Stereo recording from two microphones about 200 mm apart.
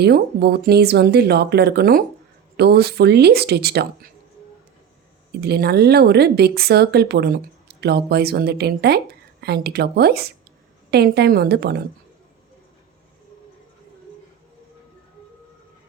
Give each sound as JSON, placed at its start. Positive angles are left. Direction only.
{"t": 0.0, "sound": "speech", "side_deg": -55}
{"t": 5.4, "sound": "a woman's voice", "side_deg": -55}